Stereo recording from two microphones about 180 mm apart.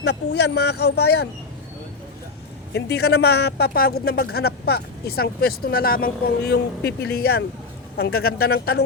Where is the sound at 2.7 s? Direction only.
65° left (ahead or behind).